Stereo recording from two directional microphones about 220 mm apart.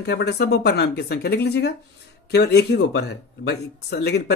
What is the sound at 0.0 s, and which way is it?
Speech, 50° left (ahead or behind).